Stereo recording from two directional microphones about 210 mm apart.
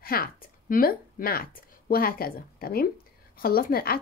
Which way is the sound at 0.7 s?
45° left (ahead or behind).